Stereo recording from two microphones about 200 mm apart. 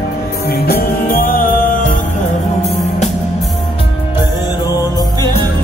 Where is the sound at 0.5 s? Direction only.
50° left (ahead or behind).